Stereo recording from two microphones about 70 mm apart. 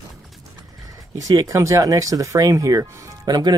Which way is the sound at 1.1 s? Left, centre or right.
Right.